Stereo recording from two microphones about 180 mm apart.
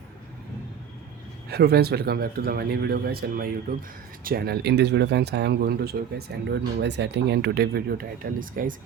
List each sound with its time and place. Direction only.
1.5 s speech: 60° right (ahead or behind)